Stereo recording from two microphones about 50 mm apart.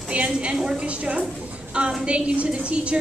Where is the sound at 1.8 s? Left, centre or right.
Right.